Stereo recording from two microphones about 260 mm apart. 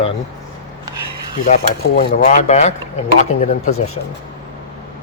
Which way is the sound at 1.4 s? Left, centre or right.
Left.